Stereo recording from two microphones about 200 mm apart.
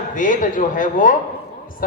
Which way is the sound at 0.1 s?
40° left (ahead or behind).